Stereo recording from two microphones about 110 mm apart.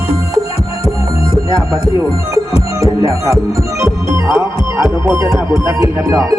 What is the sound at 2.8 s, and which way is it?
Music, 30° right (ahead or behind).